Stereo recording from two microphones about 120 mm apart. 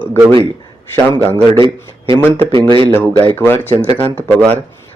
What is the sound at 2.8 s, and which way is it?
Speech, 15° left (ahead or behind).